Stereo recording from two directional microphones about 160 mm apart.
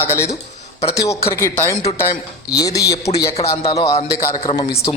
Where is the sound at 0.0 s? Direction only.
15° left (ahead or behind).